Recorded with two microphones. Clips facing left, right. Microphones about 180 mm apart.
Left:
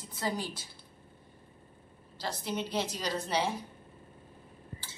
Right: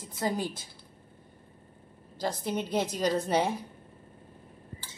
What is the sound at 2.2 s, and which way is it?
A woman's voice, 50° right (ahead or behind).